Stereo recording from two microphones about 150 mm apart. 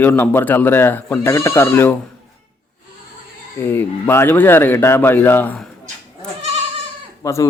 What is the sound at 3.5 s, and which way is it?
Speech, 15° left (ahead or behind).